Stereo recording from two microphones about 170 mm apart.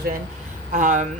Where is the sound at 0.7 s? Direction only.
45° right (ahead or behind).